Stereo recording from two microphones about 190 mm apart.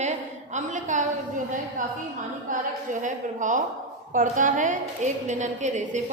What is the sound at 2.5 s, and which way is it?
A woman's voice, 45° right (ahead or behind).